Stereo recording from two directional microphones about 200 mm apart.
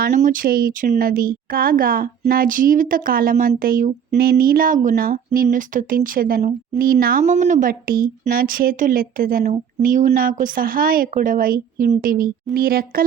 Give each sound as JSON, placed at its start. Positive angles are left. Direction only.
{"t": 0.0, "sound": "speech", "side_deg": -40}